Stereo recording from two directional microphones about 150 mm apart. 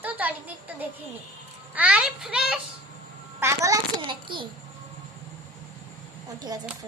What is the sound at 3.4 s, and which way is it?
Speech, 20° right (ahead or behind).